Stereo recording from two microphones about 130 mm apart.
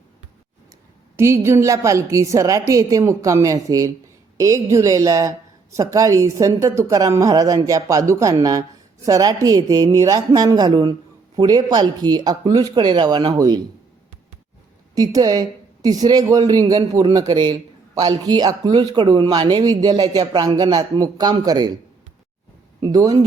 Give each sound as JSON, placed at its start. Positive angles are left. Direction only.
{"t": 1.1, "sound": "a woman's voice", "side_deg": -20}
{"t": 14.9, "sound": "a woman's voice", "side_deg": -30}
{"t": 22.8, "sound": "a woman's voice", "side_deg": -30}